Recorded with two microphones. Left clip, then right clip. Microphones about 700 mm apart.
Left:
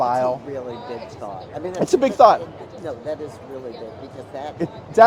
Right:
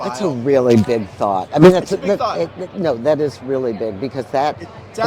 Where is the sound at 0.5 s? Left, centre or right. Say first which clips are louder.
Right 16 dB; right.